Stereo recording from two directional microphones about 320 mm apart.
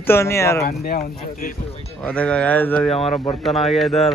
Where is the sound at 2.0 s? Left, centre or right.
Centre.